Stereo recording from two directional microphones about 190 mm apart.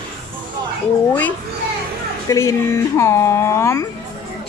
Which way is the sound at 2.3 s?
15° left (ahead or behind).